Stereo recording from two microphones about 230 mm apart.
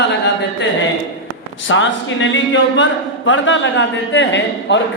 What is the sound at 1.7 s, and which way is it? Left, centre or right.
Speech, left.